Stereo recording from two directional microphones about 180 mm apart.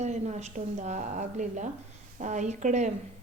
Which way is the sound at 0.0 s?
40° right (ahead or behind).